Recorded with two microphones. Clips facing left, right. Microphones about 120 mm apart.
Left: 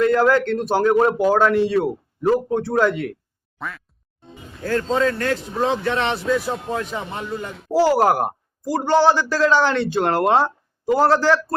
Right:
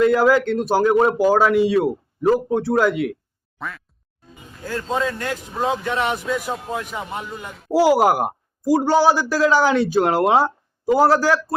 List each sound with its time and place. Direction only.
0.0 s a man's voice: 5° right (ahead or behind)
3.6 s quack: centre (ahead or behind)
4.2 s speech: 25° left (ahead or behind)
4.6 s a man's voice: 15° right (ahead or behind)